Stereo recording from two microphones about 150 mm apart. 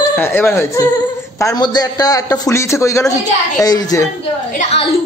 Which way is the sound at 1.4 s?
25° left (ahead or behind).